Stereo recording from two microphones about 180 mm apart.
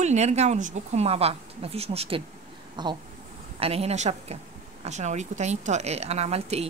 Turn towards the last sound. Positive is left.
turn(degrees=-35)  # may be behind; listen again after turning